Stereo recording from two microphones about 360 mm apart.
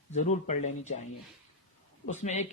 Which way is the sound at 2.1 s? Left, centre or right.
Centre.